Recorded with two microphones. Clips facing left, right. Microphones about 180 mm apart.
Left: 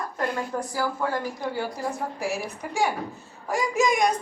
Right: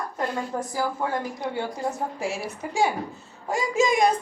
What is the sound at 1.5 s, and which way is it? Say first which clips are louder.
A woman's voice: right 1 dB; 25° right (ahead or behind).